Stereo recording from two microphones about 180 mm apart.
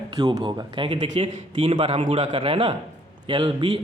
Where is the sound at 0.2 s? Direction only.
25° right (ahead or behind).